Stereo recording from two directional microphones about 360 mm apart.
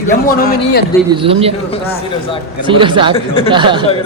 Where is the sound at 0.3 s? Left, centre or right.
Left.